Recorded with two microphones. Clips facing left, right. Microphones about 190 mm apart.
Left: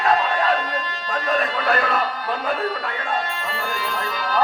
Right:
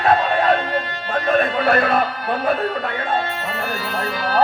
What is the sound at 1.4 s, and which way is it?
Speech, 60° right (ahead or behind).